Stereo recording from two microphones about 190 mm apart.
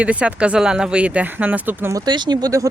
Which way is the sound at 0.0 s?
5° right (ahead or behind).